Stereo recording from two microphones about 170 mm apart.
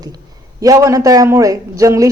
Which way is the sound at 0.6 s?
20° right (ahead or behind).